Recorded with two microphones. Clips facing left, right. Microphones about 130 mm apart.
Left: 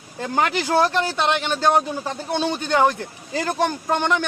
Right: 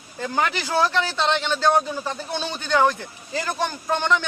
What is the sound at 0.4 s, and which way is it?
A man's voice, 15° left (ahead or behind).